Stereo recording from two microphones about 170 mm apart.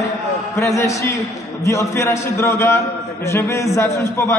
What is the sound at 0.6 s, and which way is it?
A man's voice, 15° left (ahead or behind).